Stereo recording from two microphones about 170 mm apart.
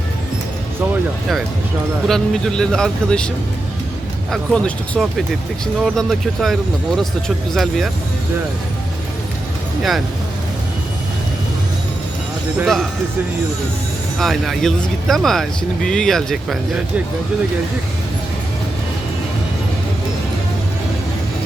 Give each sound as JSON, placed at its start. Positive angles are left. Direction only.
{"t": 2.0, "sound": "speech", "side_deg": 5}
{"t": 4.3, "sound": "speech", "side_deg": 5}
{"t": 12.5, "sound": "speech", "side_deg": 0}
{"t": 14.2, "sound": "speech", "side_deg": 0}